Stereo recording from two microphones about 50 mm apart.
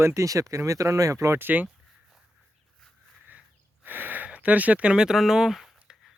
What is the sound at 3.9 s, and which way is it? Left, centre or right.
Speech, right.